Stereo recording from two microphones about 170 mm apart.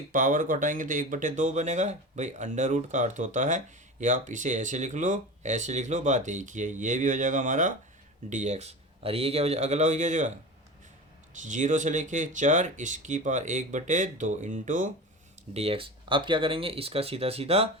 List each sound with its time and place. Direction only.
0.1 s speech: 50° right (ahead or behind)
11.4 s speech: 45° right (ahead or behind)
15.5 s speech: 35° right (ahead or behind)